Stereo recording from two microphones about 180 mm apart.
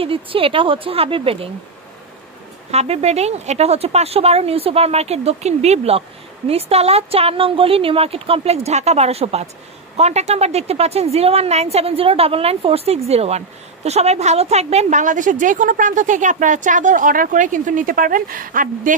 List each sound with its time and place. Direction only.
0.0 s speech: 30° right (ahead or behind)
2.7 s a woman's voice: 35° right (ahead or behind)